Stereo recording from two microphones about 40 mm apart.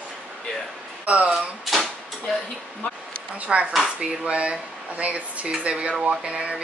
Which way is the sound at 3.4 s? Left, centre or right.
Right.